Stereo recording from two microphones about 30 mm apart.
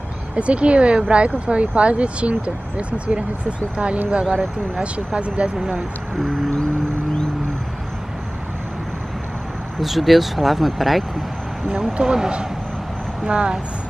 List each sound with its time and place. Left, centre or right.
0.4 s speech: right
6.2 s music: centre
9.8 s speech: centre
11.7 s speech: centre
13.2 s speech: right